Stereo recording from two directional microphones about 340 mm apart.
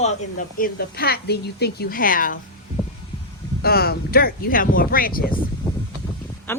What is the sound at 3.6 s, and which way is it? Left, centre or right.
Speech, left.